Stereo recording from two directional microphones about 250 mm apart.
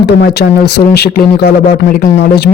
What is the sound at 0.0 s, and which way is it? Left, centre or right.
Speech, left.